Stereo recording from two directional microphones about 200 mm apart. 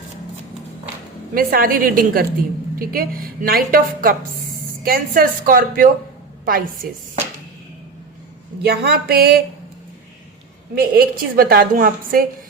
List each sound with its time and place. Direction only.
1.3 s a woman's voice: 45° right (ahead or behind)
8.6 s a woman's voice: 50° right (ahead or behind)
10.8 s a woman's voice: 50° right (ahead or behind)